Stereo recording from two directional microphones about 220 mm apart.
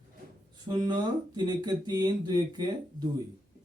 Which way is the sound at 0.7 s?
20° right (ahead or behind).